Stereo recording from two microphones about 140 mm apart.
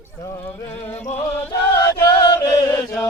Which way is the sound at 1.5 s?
25° left (ahead or behind).